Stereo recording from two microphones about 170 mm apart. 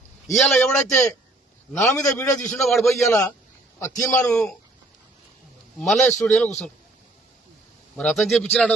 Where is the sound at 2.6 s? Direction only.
Centre (ahead or behind).